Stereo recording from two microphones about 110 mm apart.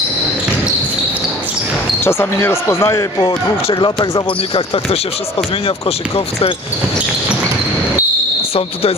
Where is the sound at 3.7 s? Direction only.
45° left (ahead or behind).